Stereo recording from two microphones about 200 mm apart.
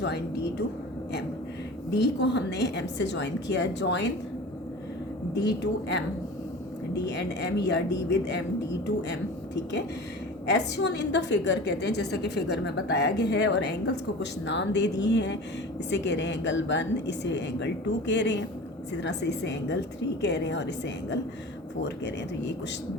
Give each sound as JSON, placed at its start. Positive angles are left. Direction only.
{"t": 0.0, "sound": "a woman's voice", "side_deg": 55}
{"t": 1.9, "sound": "a woman's voice", "side_deg": 60}
{"t": 5.3, "sound": "a woman's voice", "side_deg": 60}
{"t": 10.4, "sound": "a woman's voice", "side_deg": 60}